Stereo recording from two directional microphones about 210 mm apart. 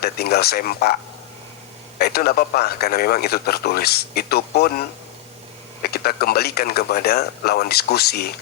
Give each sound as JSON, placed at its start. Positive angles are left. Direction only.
{"t": 0.0, "sound": "speech", "side_deg": 50}
{"t": 2.0, "sound": "speech", "side_deg": 50}